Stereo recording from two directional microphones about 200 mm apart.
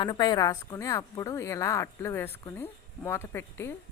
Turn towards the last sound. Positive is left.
turn(degrees=15)  # may be behind; listen again after turning